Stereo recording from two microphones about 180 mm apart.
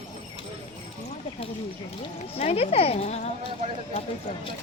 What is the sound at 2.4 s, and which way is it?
Speech, 35° left (ahead or behind).